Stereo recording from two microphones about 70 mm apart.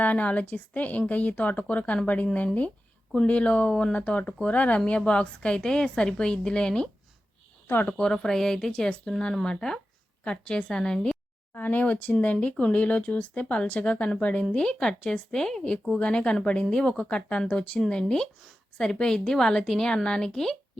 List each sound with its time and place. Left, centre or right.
0.0 s a woman's voice: left
7.7 s a woman's voice: left
8.0 s a woman's voice: centre
11.5 s a woman's voice: left; by 20.6 s centre